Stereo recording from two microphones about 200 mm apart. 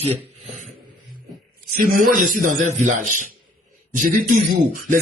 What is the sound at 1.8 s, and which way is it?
A man's voice, 45° right (ahead or behind).